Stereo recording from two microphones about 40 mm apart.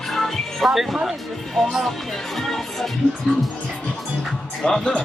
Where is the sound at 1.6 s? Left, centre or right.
Centre.